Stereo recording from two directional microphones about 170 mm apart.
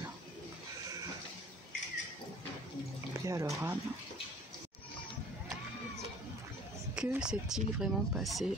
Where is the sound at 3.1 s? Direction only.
20° right (ahead or behind).